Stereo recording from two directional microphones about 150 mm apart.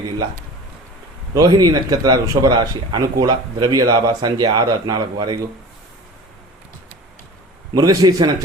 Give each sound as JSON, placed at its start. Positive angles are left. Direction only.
{"t": 1.3, "sound": "a man's voice", "side_deg": -25}
{"t": 7.7, "sound": "a man's voice", "side_deg": -25}